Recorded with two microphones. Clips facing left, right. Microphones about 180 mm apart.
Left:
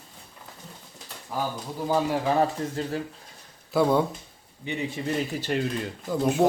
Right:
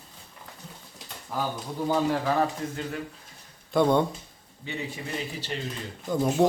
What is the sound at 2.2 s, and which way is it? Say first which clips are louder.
Speech: left 2 dB; 20° left (ahead or behind).